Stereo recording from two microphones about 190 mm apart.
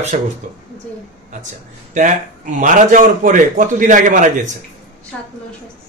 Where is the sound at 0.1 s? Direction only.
40° right (ahead or behind).